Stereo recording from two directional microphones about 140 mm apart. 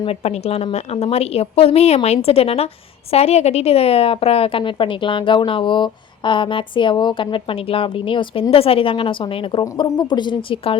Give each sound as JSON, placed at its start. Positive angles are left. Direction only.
{"t": 0.0, "sound": "a woman's voice", "side_deg": 45}